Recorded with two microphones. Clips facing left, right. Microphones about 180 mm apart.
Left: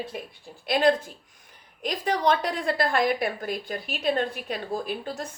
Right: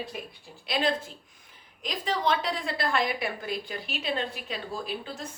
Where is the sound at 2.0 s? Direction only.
55° left (ahead or behind).